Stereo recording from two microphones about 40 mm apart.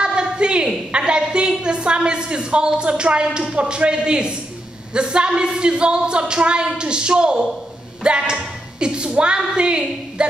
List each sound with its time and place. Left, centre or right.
0.0 s a woman's voice: right
8.0 s a sound: right
9.6 s a woman's voice: right